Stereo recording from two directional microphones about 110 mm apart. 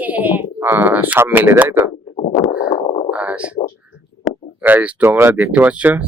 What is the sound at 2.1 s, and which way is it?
Stomach rumble, 90° left.